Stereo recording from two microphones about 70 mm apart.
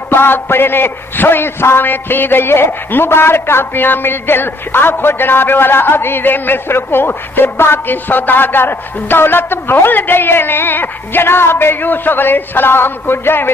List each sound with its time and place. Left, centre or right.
0.1 s a man's voice: left